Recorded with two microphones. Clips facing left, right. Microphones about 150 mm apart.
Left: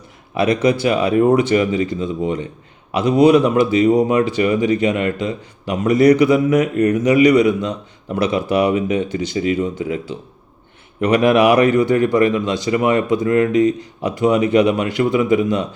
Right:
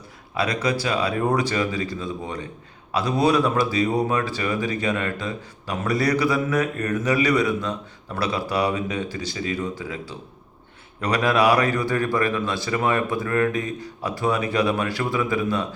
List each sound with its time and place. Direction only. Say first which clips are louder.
0.3 s speech: left 8 dB; 20° left (ahead or behind)